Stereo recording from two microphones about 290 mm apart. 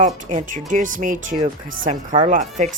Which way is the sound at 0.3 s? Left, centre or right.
Right.